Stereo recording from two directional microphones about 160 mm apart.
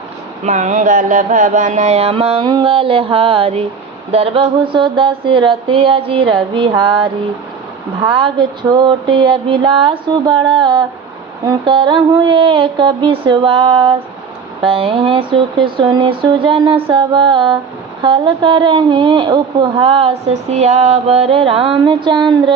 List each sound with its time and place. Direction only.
0.4 s mantra: 45° right (ahead or behind)
2.5 s a woman's voice: 30° right (ahead or behind)